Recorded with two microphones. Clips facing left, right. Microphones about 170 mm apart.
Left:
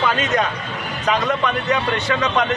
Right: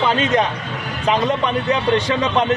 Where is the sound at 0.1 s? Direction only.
25° right (ahead or behind).